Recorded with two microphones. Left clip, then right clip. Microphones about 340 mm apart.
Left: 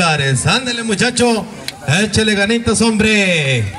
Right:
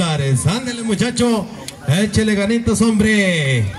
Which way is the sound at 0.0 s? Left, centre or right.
Left.